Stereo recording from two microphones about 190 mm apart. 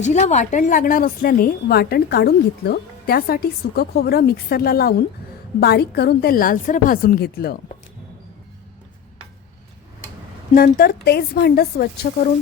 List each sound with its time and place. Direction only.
0.0 s a woman's voice: 35° left (ahead or behind); by 7.6 s 55° left (ahead or behind)
10.5 s a woman's voice: 50° left (ahead or behind)